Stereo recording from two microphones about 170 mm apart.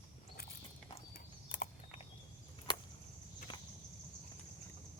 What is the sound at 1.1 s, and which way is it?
Horse, 55° left (ahead or behind).